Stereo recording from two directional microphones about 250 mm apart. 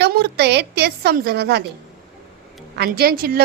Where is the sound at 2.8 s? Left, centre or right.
Right.